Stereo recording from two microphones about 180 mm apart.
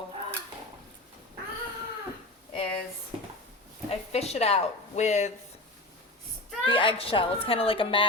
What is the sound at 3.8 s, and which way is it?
Speech, 35° left (ahead or behind).